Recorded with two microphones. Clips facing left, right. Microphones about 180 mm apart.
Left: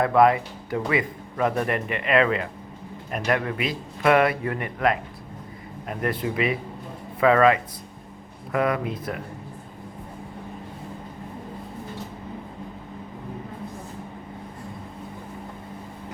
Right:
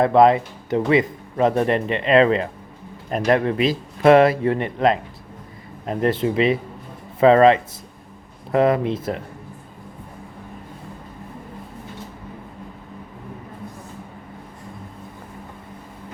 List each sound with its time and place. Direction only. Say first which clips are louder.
0.0 s speech: right 4 dB; 25° right (ahead or behind)